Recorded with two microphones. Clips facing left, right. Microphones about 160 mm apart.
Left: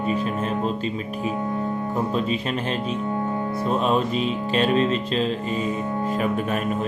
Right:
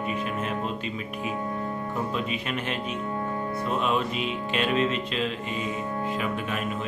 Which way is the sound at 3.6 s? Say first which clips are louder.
Left 5 dB; 35° left (ahead or behind).